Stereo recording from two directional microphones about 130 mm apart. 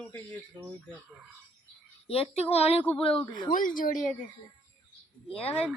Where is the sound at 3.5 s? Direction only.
90° left.